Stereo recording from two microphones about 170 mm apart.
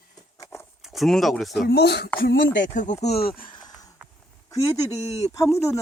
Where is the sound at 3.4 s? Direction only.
25° left (ahead or behind).